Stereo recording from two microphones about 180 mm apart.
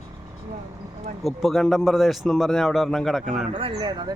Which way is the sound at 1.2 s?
Centre (ahead or behind).